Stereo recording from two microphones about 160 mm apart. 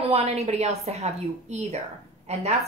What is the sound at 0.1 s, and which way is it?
A woman's voice, 40° right (ahead or behind).